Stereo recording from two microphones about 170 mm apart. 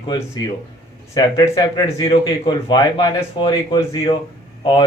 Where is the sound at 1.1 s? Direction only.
25° left (ahead or behind).